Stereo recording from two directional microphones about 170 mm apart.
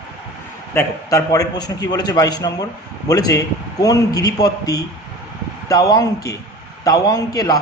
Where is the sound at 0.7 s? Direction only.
15° left (ahead or behind).